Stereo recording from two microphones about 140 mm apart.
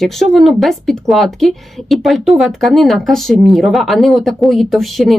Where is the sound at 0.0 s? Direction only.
Centre (ahead or behind).